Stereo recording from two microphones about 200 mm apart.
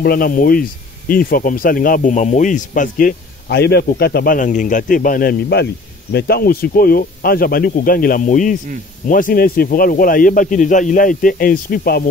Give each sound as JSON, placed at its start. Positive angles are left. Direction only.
{"t": 0.0, "sound": "speech", "side_deg": 45}
{"t": 3.4, "sound": "speech", "side_deg": 55}